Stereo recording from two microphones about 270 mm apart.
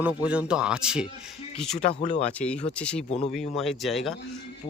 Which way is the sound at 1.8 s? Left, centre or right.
Left.